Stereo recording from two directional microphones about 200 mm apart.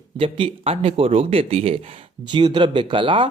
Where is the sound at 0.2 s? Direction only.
25° right (ahead or behind).